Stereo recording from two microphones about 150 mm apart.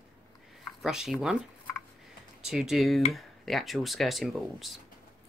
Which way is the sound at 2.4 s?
5° right (ahead or behind).